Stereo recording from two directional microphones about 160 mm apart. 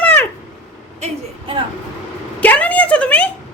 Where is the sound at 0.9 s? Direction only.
45° right (ahead or behind).